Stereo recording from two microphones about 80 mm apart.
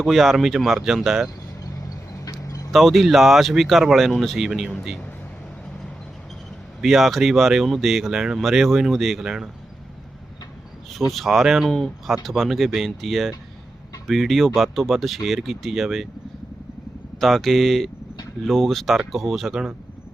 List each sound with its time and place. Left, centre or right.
0.0 s speech: centre
1.6 s a sound: left
2.7 s speech: centre
6.8 s speech: centre
11.1 s speech: centre
17.2 s speech: centre